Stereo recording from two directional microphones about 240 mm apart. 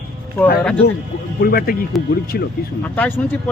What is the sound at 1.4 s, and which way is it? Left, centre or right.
Speech, left.